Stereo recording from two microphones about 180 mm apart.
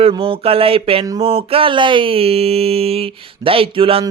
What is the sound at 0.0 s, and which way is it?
Music, 30° right (ahead or behind).